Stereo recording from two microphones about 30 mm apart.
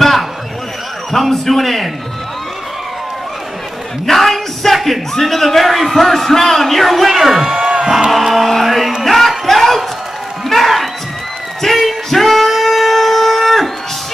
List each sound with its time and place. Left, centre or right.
0.0 s a sound: centre
1.2 s speech: centre
4.0 s music: centre
5.1 s speech: centre
7.1 s speech: centre
7.4 s crowd: centre
8.2 s music: centre
9.5 s a sound: centre
10.5 s music: centre
11.6 s shofar: centre